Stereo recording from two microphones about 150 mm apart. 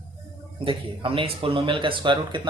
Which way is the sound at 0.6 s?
35° right (ahead or behind).